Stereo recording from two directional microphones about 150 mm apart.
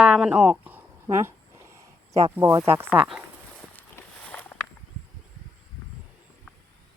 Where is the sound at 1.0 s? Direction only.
20° right (ahead or behind).